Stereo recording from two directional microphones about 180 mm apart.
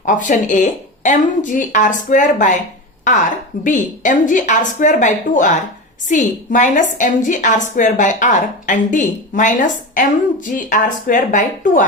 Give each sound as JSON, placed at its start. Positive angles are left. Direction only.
{"t": 0.0, "sound": "a woman's voice", "side_deg": 45}
{"t": 3.6, "sound": "a woman's voice", "side_deg": 45}